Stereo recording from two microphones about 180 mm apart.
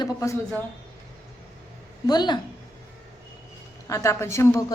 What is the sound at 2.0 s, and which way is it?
Speech, 25° left (ahead or behind).